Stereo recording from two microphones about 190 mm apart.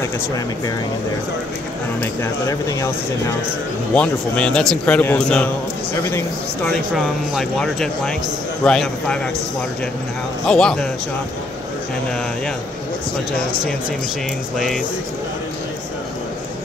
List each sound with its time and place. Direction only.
2.0 s a man's voice: 15° left (ahead or behind)
7.3 s a man's voice: centre (ahead or behind)
10.4 s a man's voice: 5° left (ahead or behind)